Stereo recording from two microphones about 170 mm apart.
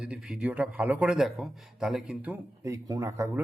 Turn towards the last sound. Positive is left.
turn(degrees=-15)  # may be behind; listen again after turning